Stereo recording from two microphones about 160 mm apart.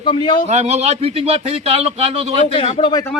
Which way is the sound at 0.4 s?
45° right (ahead or behind).